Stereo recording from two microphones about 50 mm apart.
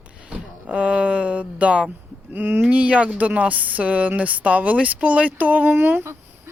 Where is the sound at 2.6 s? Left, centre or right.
Right.